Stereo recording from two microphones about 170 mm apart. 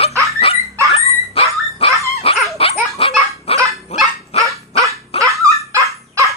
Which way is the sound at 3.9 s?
40° left (ahead or behind).